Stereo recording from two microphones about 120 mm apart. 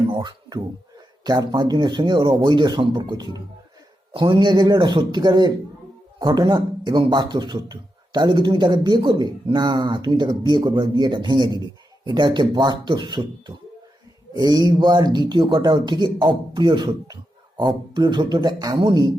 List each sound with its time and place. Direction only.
0.1 s a man's voice: 40° right (ahead or behind)
14.3 s a man's voice: 35° right (ahead or behind)